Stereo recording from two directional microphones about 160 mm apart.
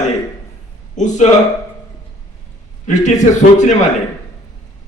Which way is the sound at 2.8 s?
50° left (ahead or behind).